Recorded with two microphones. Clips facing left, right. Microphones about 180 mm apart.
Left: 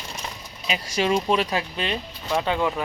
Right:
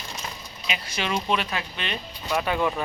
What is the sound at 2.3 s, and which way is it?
Speech, 20° left (ahead or behind).